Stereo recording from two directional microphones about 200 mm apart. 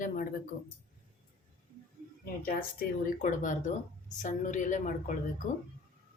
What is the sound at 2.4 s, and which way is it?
Speech, 45° left (ahead or behind).